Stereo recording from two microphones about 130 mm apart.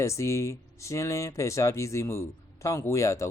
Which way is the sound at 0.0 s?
25° left (ahead or behind).